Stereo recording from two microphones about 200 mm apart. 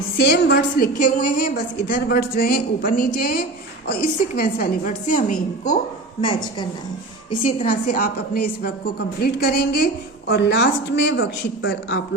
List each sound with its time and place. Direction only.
0.2 s a woman's voice: 55° left (ahead or behind); by 5.2 s 40° left (ahead or behind)
6.2 s speech: 25° left (ahead or behind)
7.6 s a woman's voice: 45° left (ahead or behind); by 12.0 s 65° left (ahead or behind)